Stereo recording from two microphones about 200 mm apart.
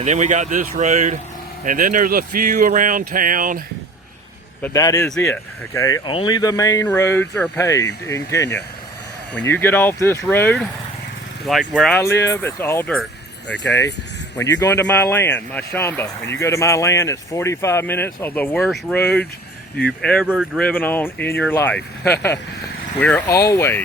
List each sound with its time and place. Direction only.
0.0 s speech: 35° right (ahead or behind)
4.6 s speech: 15° left (ahead or behind)
5.0 s speech: 5° left (ahead or behind)
5.7 s speech: 15° left (ahead or behind)
9.5 s speech: 10° left (ahead or behind)
12.0 s speech: 15° left (ahead or behind)
14.6 s speech: 10° left (ahead or behind); by 20.7 s 5° right (ahead or behind)
20.7 s speech: 10° left (ahead or behind)